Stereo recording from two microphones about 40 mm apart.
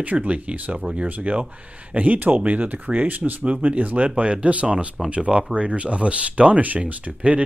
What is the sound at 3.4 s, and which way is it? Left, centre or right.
Speech, right.